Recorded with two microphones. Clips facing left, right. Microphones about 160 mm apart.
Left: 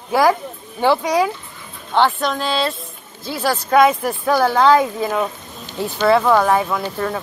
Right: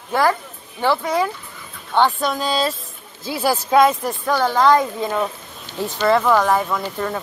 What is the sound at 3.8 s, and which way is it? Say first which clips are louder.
Speech: left 2 dB; 10° left (ahead or behind).